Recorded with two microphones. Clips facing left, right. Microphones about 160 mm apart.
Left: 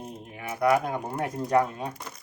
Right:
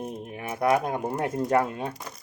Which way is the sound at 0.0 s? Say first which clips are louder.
Right 4 dB; 20° right (ahead or behind).